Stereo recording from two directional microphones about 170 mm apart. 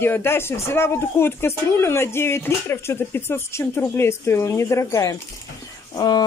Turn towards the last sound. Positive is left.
turn(degrees=25)  # may be behind; listen again after turning